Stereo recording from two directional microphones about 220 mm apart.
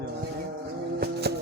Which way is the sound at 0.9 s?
50° right (ahead or behind).